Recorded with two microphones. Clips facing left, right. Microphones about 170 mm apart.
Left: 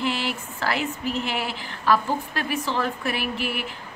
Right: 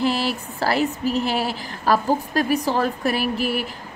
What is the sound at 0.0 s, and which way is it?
Speech, 35° right (ahead or behind).